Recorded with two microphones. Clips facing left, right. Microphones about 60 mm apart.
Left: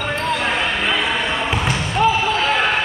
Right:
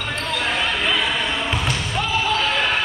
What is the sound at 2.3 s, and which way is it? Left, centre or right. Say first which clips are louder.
Basketball bounce: left 3 dB; centre.